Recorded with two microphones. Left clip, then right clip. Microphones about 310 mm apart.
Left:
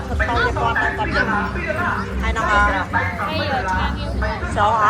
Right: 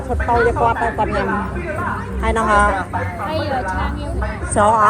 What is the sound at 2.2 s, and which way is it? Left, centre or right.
Speech, centre.